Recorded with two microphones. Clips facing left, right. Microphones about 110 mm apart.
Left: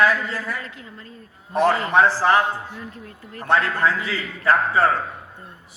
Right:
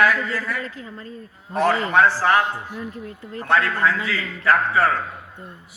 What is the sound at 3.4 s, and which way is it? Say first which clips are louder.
A man's voice: even; 25° left (ahead or behind).